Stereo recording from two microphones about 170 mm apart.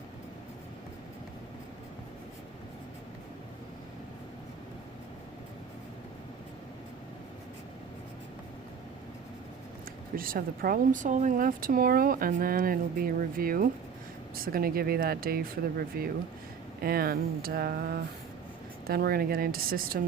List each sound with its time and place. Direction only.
10.2 s speech: 60° right (ahead or behind)